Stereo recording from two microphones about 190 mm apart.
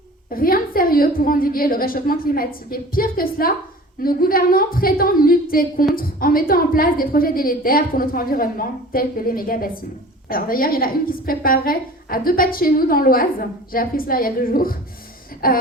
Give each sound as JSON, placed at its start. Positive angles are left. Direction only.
{"t": 0.3, "sound": "a woman's voice", "side_deg": 50}